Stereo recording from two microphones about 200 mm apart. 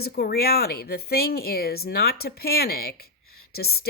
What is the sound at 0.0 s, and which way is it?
Speech, 50° left (ahead or behind).